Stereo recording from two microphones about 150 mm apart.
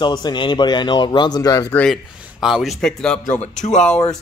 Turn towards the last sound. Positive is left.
turn(degrees=5)  # may be behind; listen again after turning